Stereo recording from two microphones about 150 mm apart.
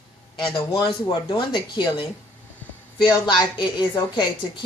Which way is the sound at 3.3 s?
30° left (ahead or behind).